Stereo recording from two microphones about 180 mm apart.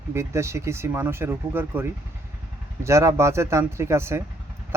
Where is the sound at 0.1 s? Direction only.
15° right (ahead or behind).